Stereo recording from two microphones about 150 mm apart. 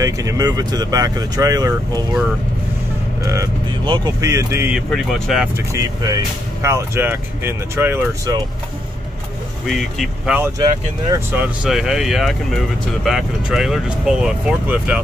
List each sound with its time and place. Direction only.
0.0 s speech: 20° right (ahead or behind)
3.8 s speech: 30° right (ahead or behind)
4.7 s speech: centre (ahead or behind)
5.7 s speech: 25° right (ahead or behind)
9.7 s speech: centre (ahead or behind)
10.6 s speech: 25° right (ahead or behind)
11.3 s speech: 5° right (ahead or behind)